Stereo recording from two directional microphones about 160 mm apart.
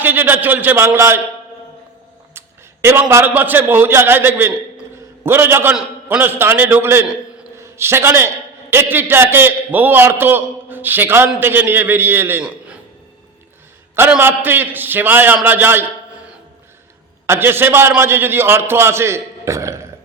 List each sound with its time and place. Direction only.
0.0 s a man's voice: 10° right (ahead or behind)
2.8 s a man's voice: 15° right (ahead or behind)
13.9 s a man's voice: 15° right (ahead or behind)